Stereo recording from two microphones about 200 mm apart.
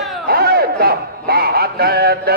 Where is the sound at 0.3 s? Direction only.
50° right (ahead or behind).